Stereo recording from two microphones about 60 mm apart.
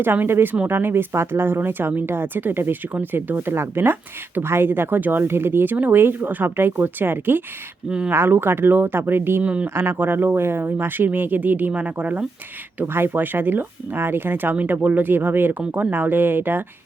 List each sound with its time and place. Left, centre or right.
0.0 s speech: right
7.9 s speech: centre
8.1 s speech: right
9.4 s speech: centre
9.6 s speech: right
14.5 s speech: right